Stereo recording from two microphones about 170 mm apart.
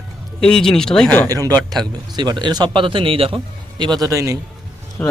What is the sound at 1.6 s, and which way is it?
A man's voice, 20° right (ahead or behind).